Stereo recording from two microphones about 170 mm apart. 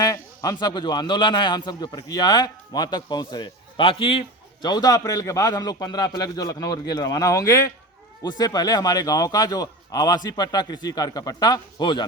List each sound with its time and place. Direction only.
0.0 s a man's voice: 20° left (ahead or behind)